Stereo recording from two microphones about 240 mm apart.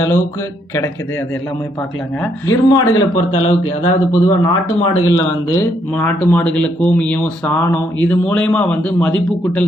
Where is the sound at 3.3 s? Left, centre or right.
Left.